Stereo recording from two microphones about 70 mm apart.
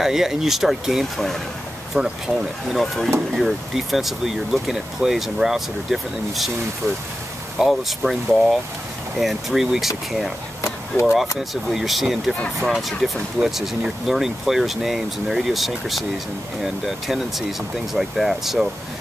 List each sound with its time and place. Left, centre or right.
0.0 s speech: centre
2.0 s speech: centre
7.5 s speech: centre
10.6 s vehicle: left
11.7 s speech: centre